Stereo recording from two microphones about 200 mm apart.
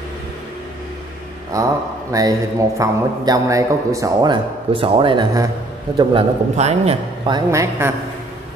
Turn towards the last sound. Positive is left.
turn(degrees=-15)  # may be behind; listen again after turning